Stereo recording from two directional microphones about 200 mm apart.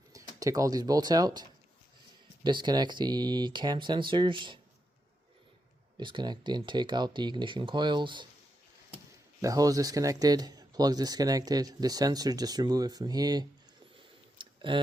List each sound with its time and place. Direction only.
0.1 s speech: 15° right (ahead or behind)
6.0 s speech: 25° right (ahead or behind)
9.4 s speech: 15° right (ahead or behind)
13.9 s a sound: 25° right (ahead or behind)